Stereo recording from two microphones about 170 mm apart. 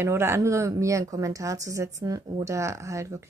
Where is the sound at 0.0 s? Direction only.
15° right (ahead or behind).